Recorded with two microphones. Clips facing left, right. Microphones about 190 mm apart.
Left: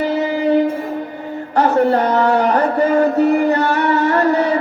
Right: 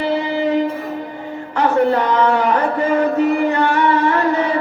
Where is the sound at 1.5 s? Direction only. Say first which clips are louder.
Left 1 dB; 40° left (ahead or behind).